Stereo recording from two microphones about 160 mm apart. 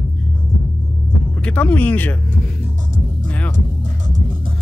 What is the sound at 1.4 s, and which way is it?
Speech, 10° left (ahead or behind).